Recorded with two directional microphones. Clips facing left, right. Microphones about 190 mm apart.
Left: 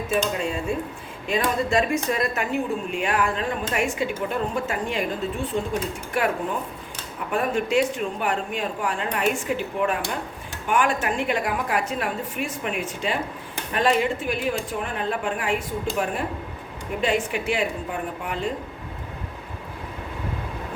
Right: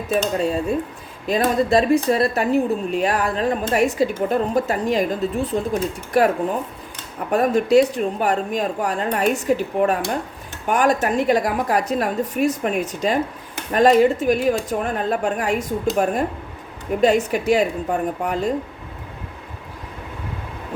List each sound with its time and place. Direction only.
0.1 s speech: 40° right (ahead or behind)
17.0 s speech: 40° right (ahead or behind)